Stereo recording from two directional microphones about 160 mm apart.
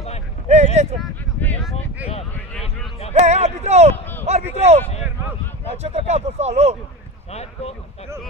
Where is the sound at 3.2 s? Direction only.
45° right (ahead or behind).